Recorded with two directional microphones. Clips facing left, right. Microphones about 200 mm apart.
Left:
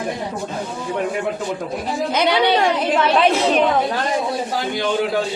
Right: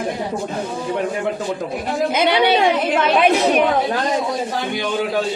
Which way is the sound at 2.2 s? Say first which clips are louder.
Right 1 dB; 20° right (ahead or behind).